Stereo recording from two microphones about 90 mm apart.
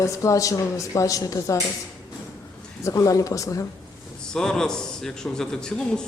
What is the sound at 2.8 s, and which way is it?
Speech, 40° left (ahead or behind).